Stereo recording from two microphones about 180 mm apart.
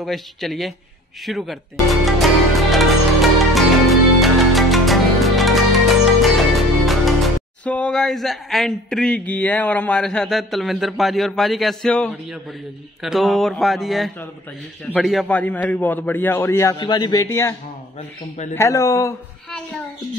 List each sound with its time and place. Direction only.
0.0 s speech: centre (ahead or behind)
1.2 s music: centre (ahead or behind)
7.6 s a man's voice: 5° left (ahead or behind)
16.7 s a man's voice: 25° left (ahead or behind)